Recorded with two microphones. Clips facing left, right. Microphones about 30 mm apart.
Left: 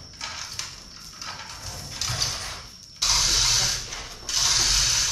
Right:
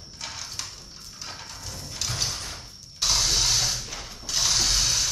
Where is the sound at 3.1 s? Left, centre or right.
Left.